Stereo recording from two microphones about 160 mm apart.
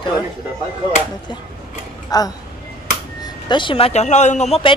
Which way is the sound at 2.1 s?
25° left (ahead or behind).